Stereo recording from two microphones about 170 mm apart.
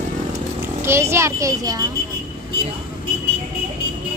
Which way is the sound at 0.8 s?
15° right (ahead or behind).